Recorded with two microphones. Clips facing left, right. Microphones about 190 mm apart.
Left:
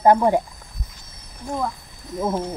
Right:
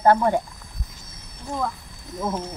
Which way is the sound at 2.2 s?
15° left (ahead or behind).